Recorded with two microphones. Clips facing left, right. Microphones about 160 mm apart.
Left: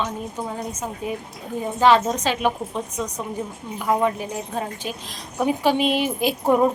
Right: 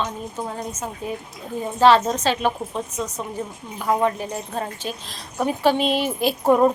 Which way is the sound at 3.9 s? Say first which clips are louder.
Even; 10° left (ahead or behind).